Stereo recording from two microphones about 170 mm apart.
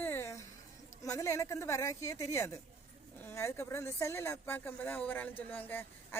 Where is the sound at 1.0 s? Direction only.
20° left (ahead or behind).